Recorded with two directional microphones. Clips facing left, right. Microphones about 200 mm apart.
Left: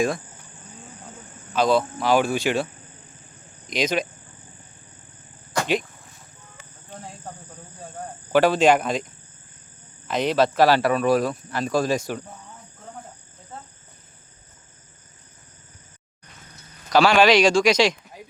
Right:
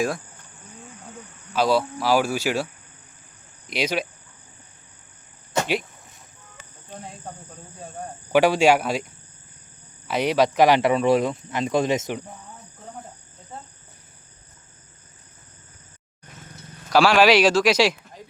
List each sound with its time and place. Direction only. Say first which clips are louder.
1.5 s speech: left 1 dB; 5° right (ahead or behind)
3.7 s speech: left 2 dB; 10° right (ahead or behind)
5.5 s cricket: right 2 dB; 25° right (ahead or behind)
8.3 s speech: even; 10° right (ahead or behind)
10.1 s speech: even; 10° right (ahead or behind)
16.9 s speech: even; 5° right (ahead or behind)